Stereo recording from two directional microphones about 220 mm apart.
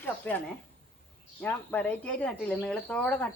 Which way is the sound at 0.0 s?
5° left (ahead or behind).